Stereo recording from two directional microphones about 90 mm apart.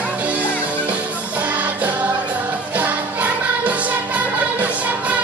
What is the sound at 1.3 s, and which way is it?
Music, 15° right (ahead or behind).